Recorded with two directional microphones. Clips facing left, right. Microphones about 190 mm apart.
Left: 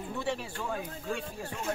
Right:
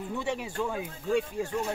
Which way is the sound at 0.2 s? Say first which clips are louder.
Even; 15° right (ahead or behind).